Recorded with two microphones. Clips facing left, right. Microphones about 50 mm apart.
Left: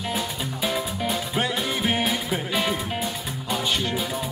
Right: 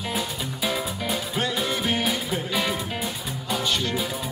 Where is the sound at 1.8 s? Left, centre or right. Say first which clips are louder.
Left 1 dB; centre.